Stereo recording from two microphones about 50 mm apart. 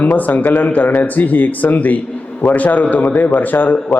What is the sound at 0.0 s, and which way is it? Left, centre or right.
A man's voice, left.